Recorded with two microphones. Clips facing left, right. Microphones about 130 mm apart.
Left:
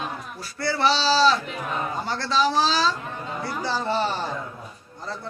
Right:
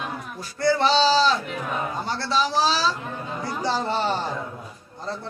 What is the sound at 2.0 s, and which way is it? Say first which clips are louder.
Speech: left 2 dB; 15° right (ahead or behind).